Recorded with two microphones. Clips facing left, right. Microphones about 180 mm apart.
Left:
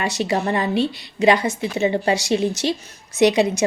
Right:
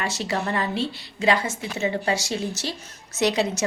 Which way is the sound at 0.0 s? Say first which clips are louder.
Left 5 dB; 15° left (ahead or behind).